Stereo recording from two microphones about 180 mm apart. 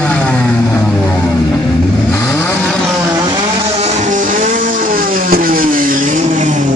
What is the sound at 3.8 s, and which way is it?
Music, 45° right (ahead or behind).